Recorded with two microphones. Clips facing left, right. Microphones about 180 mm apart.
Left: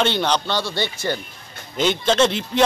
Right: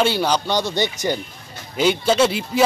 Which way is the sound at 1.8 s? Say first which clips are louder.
Right 1 dB; 5° right (ahead or behind).